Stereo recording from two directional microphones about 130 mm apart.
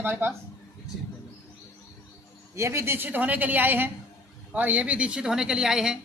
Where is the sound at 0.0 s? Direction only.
15° right (ahead or behind).